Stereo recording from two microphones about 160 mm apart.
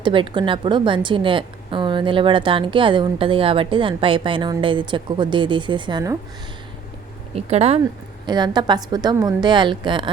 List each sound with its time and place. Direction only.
0.0 s a woman's voice: 30° right (ahead or behind)
7.3 s a woman's voice: 40° right (ahead or behind)
8.3 s a woman's voice: 25° right (ahead or behind)